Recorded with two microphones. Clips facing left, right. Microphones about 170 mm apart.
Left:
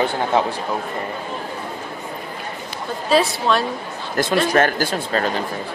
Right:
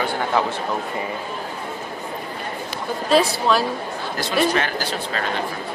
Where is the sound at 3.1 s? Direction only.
Centre (ahead or behind).